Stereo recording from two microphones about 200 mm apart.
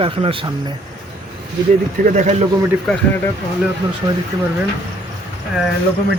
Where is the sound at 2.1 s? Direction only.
35° right (ahead or behind).